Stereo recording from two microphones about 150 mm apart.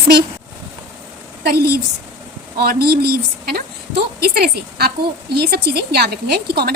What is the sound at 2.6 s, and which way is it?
A woman's voice, 90° right.